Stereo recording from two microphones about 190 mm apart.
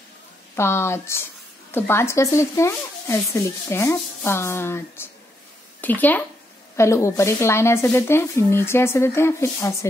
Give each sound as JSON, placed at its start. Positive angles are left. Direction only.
{"t": 0.6, "sound": "speech", "side_deg": 15}